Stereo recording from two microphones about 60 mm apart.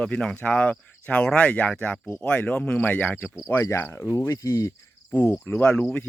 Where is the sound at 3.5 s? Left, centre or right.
Left.